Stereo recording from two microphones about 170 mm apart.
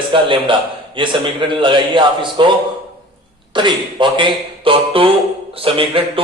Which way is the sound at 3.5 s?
30° right (ahead or behind).